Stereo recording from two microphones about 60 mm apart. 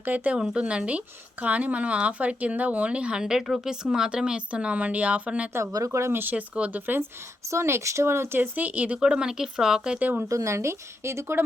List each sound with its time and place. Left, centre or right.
0.0 s speech: right
0.3 s speech: centre
5.9 s speech: right
6.1 s speech: right
7.4 s speech: right
8.5 s speech: right
9.0 s speech: centre
10.0 s speech: right
10.2 s speech: right